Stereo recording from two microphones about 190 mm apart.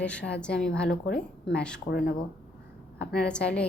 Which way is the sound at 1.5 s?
5° left (ahead or behind).